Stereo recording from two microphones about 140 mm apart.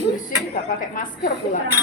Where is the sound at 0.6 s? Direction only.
75° left (ahead or behind).